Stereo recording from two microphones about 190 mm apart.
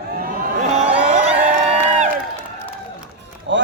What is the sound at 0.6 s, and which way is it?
Crowd, 35° right (ahead or behind).